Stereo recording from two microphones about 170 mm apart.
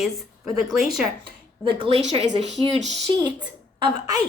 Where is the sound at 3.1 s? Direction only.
25° right (ahead or behind).